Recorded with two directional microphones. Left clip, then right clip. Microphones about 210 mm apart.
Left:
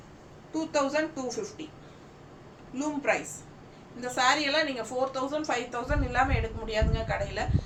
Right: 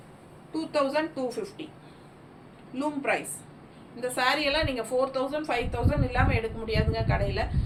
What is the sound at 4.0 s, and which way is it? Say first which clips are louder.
A woman's voice: even; 10° left (ahead or behind).